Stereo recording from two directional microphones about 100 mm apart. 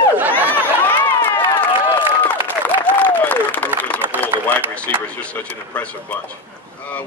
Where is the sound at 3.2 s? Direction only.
15° left (ahead or behind).